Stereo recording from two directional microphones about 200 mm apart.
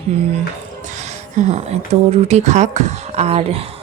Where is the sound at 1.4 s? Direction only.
35° right (ahead or behind).